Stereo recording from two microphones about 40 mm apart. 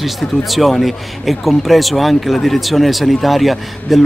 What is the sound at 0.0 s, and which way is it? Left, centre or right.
Speech, centre.